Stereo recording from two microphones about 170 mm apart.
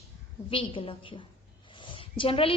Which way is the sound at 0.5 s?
30° left (ahead or behind).